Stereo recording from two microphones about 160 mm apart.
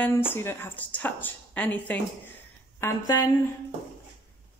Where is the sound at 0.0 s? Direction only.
15° left (ahead or behind).